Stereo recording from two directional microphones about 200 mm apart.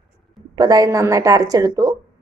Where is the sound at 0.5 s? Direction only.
20° right (ahead or behind).